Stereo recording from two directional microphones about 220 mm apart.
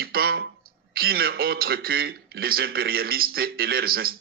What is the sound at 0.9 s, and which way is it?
A man's voice, 45° right (ahead or behind).